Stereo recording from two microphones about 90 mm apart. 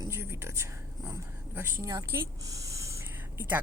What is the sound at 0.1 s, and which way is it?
Speech, 30° right (ahead or behind).